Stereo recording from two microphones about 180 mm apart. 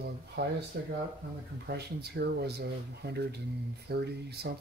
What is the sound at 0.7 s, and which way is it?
Speech, 60° right (ahead or behind).